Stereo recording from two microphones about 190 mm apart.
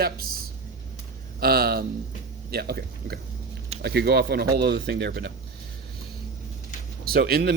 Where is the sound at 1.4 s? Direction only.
50° right (ahead or behind).